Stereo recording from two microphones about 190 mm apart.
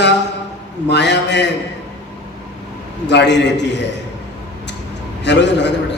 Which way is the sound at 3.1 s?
65° left (ahead or behind).